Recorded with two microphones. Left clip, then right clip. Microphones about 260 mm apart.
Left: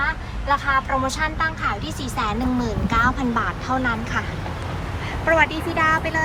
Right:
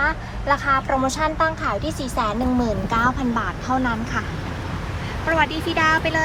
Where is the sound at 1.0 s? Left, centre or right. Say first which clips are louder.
Right 2 dB; right; by 4.2 s centre.